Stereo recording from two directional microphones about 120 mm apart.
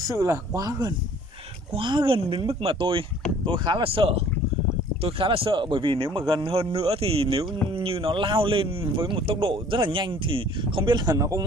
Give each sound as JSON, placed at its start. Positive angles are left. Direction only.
{"t": 0.1, "sound": "speech", "side_deg": -25}
{"t": 1.7, "sound": "speech", "side_deg": -45}